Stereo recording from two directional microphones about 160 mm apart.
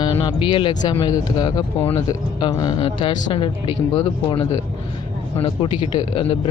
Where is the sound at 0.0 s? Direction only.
35° left (ahead or behind).